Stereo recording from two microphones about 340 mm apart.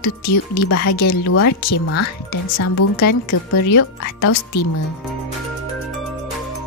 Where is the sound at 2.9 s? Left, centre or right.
Left.